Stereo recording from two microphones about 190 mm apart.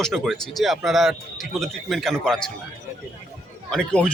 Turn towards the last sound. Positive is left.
turn(degrees=5)  # may be behind; listen again after turning